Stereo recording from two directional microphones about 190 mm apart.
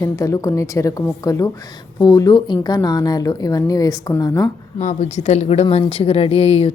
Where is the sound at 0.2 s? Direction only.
15° left (ahead or behind).